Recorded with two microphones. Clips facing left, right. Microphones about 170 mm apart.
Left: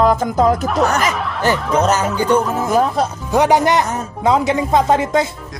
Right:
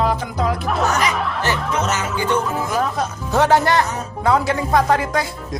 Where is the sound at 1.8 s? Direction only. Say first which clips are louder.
Left 6 dB; 40° left (ahead or behind).